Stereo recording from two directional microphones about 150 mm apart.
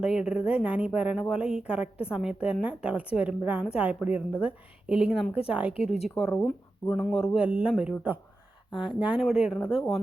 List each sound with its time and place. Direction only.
0.0 s a woman's voice: 5° right (ahead or behind)
5.8 s speech: 45° left (ahead or behind)
6.1 s speech: centre (ahead or behind)